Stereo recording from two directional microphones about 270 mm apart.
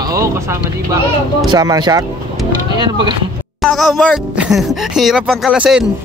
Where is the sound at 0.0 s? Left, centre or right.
Centre.